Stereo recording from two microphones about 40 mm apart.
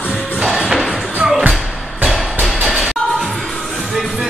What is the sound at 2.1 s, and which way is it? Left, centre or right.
Music, centre.